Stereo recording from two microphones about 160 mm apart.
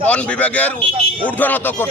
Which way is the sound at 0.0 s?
10° left (ahead or behind).